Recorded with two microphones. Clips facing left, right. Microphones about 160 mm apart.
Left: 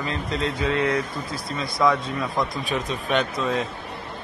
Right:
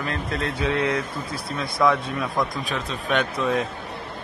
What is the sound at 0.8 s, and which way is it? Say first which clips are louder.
Speech: left 1 dB; 65° right (ahead or behind).